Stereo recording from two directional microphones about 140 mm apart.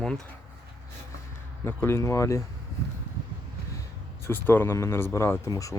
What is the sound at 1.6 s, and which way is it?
Speech, 15° left (ahead or behind).